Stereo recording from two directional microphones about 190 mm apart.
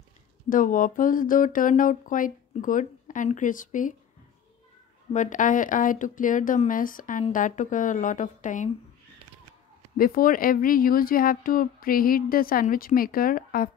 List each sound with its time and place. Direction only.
0.5 s speech: 45° left (ahead or behind)
5.1 s speech: 40° left (ahead or behind)
9.9 s speech: 50° left (ahead or behind)